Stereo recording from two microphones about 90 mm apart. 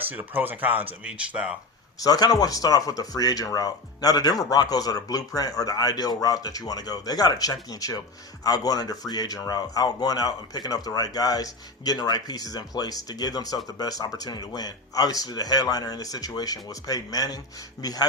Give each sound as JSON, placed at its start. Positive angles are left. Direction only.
{"t": 0.0, "sound": "speech", "side_deg": -20}
{"t": 2.0, "sound": "speech", "side_deg": 45}